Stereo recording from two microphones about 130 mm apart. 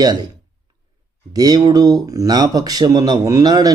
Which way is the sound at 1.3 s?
30° right (ahead or behind).